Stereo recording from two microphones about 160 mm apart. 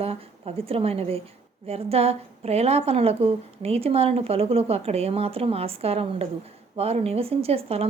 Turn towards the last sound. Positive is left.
turn(degrees=-40)  # may be behind; listen again after turning